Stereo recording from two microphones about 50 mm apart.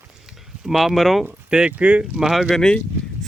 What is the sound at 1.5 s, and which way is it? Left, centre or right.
Speech, right.